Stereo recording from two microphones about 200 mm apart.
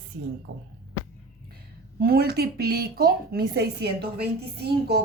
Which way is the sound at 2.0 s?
50° right (ahead or behind).